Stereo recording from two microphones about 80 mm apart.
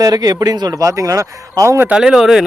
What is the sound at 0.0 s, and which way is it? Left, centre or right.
Speech, right.